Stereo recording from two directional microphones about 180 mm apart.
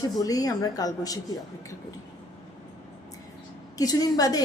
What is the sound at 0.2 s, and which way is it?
A woman's voice, 20° left (ahead or behind).